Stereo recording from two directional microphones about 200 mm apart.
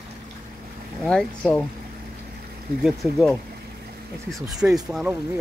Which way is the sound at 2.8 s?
Centre (ahead or behind).